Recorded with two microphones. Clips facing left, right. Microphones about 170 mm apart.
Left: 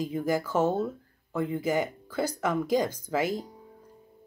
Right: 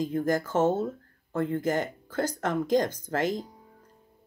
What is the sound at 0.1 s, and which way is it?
Speech, 10° left (ahead or behind).